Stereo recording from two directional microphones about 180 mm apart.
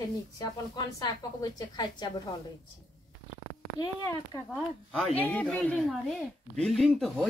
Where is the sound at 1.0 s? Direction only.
20° left (ahead or behind).